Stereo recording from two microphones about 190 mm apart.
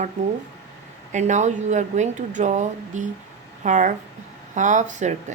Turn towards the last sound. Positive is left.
turn(degrees=-40)  # may be behind; listen again after turning